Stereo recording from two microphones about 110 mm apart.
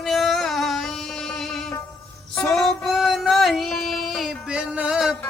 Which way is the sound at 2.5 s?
Centre (ahead or behind).